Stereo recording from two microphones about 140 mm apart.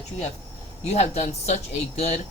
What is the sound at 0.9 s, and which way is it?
Speech, 50° left (ahead or behind).